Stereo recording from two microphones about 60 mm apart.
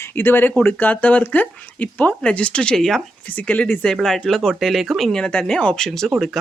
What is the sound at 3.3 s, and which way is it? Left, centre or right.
Speech, left.